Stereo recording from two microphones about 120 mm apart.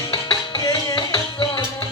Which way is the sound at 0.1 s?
45° left (ahead or behind).